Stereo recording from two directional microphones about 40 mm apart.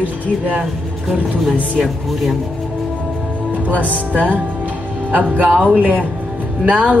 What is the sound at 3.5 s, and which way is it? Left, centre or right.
Speech, right.